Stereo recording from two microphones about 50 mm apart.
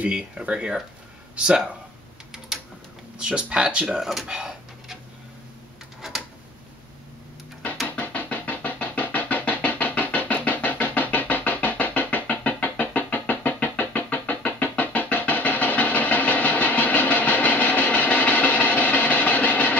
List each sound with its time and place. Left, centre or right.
0.0 s speech: right
3.2 s speech: centre
4.0 s speech: centre
4.3 s a sound: centre
8.0 s music: left